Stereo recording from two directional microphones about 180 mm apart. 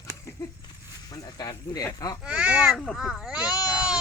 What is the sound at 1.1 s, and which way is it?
Speech, 20° left (ahead or behind).